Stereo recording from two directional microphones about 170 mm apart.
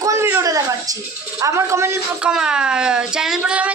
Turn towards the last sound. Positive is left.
turn(degrees=-5)  # may be behind; listen again after turning